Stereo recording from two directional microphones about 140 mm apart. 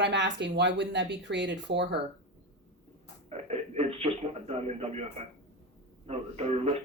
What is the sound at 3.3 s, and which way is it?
Speech, 50° right (ahead or behind).